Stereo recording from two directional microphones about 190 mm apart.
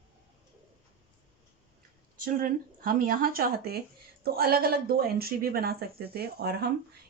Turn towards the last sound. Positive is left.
turn(degrees=-55)  # may be behind; listen again after turning